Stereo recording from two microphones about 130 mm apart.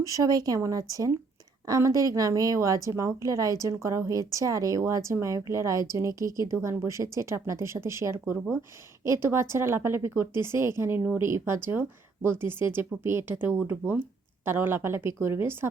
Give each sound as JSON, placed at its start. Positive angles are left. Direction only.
{"t": 0.0, "sound": "a woman's voice", "side_deg": -25}